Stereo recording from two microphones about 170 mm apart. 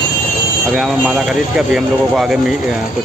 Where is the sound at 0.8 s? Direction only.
Centre (ahead or behind).